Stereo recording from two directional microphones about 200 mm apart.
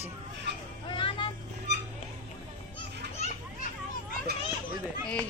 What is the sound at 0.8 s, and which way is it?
Vehicle, 25° left (ahead or behind).